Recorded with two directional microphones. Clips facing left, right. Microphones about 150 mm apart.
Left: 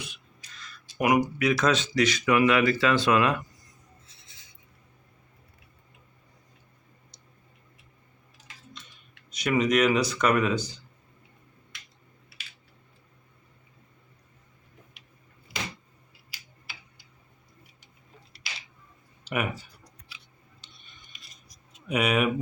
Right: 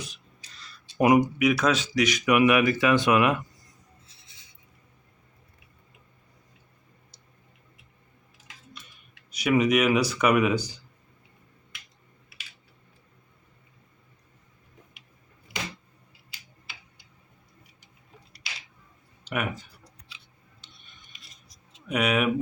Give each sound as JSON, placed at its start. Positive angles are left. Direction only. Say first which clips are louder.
{"t": 0.0, "sound": "a sound", "louder": "right 2 dB", "side_deg": -35}
{"t": 1.4, "sound": "speech", "louder": "right 1 dB", "side_deg": -10}
{"t": 9.3, "sound": "speech", "louder": "right 2 dB", "side_deg": -10}
{"t": 19.2, "sound": "speech", "louder": "even", "side_deg": 0}
{"t": 19.8, "sound": "a sound", "louder": "even", "side_deg": -25}
{"t": 20.6, "sound": "rub", "louder": "right 2 dB", "side_deg": 0}
{"t": 21.8, "sound": "speech", "louder": "even", "side_deg": 0}